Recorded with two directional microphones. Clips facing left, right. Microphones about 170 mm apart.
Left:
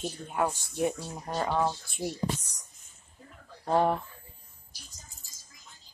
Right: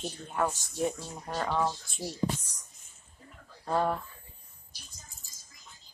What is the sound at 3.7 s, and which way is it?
Speech, 15° left (ahead or behind).